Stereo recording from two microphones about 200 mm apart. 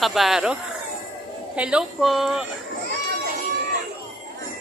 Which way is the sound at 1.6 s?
5° right (ahead or behind).